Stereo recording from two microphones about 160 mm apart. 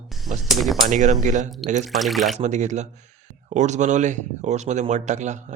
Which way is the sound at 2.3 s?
50° right (ahead or behind).